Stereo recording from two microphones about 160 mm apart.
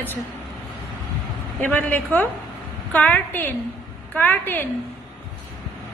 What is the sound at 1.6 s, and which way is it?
A woman's voice, 10° left (ahead or behind).